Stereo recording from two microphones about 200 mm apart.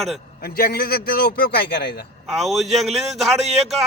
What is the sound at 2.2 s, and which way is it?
A man's voice, centre (ahead or behind).